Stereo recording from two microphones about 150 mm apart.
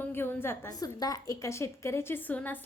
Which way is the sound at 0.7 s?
25° left (ahead or behind).